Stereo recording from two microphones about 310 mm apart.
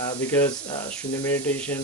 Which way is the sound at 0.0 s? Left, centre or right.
Centre.